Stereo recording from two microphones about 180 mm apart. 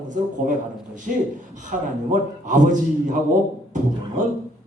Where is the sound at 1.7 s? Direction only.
45° right (ahead or behind).